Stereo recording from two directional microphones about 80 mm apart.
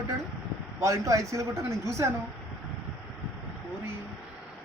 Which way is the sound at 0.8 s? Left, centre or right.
Right.